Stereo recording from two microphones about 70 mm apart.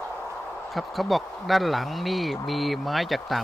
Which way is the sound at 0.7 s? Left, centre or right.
Centre.